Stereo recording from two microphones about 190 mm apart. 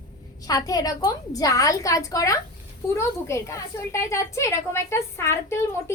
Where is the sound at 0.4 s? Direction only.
20° left (ahead or behind).